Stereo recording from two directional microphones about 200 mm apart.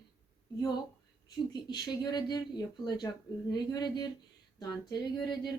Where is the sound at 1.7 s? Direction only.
20° left (ahead or behind).